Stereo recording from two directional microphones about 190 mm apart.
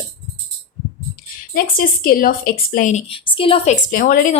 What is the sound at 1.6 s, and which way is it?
A woman's voice, 50° left (ahead or behind).